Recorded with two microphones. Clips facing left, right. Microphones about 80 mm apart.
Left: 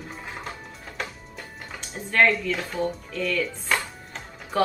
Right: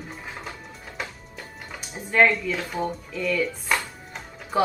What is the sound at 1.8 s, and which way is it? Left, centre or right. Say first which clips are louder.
Speech: right 1 dB; centre.